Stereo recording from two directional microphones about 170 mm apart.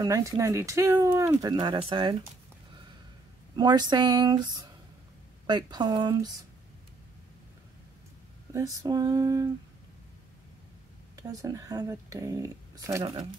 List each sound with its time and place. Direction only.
0.0 s speech: 20° right (ahead or behind)
3.5 s speech: 25° right (ahead or behind)
8.5 s speech: 20° right (ahead or behind)
11.1 s speech: 20° right (ahead or behind)
13.0 s speech: 30° right (ahead or behind)